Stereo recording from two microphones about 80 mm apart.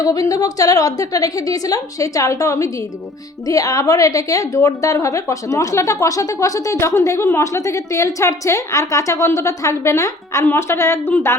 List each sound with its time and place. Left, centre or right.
0.0 s a woman's voice: left